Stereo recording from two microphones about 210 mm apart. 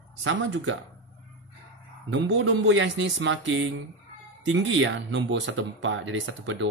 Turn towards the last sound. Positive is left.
turn(degrees=-60)  # may be behind; listen again after turning